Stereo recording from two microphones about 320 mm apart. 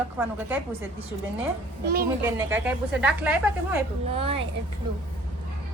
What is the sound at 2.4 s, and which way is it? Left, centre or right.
A woman's voice, centre.